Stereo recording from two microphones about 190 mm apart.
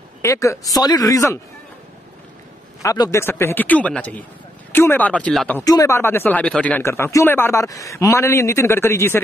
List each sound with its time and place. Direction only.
0.2 s speech: 15° left (ahead or behind)
2.8 s speech: 15° left (ahead or behind)
5.6 s speech: 15° left (ahead or behind)